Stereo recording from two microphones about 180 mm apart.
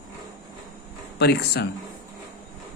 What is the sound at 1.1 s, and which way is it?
Speech, 65° left (ahead or behind).